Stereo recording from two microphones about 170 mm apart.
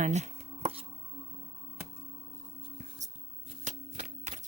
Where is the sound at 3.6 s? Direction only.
40° right (ahead or behind).